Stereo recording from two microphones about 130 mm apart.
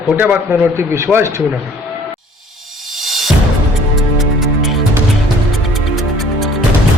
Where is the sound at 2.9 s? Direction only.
Centre (ahead or behind).